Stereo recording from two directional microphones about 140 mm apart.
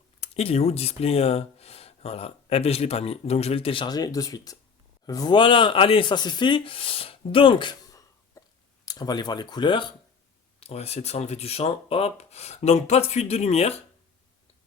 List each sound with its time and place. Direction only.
0.2 s speech: 45° left (ahead or behind)
10.6 s speech: 45° left (ahead or behind)